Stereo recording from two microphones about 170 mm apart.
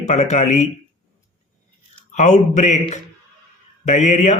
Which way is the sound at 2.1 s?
45° left (ahead or behind).